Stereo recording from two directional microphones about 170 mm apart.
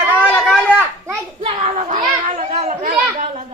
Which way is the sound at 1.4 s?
40° right (ahead or behind).